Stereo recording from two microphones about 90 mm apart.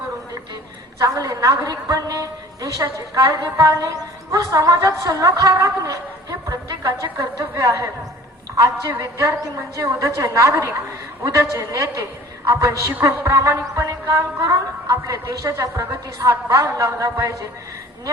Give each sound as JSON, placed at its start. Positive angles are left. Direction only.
{"t": 1.0, "sound": "a woman's voice", "side_deg": -40}
{"t": 9.0, "sound": "a woman's voice", "side_deg": -40}